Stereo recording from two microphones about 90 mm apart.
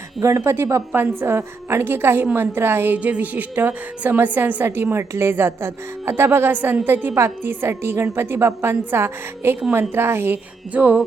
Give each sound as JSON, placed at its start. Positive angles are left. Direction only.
{"t": 0.2, "sound": "a woman's voice", "side_deg": -35}